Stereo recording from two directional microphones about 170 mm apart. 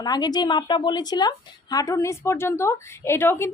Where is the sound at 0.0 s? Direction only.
25° left (ahead or behind).